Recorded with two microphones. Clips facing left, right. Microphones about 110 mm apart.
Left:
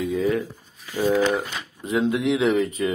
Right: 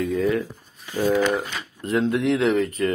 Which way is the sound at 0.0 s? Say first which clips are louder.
Right 1 dB; centre (ahead or behind).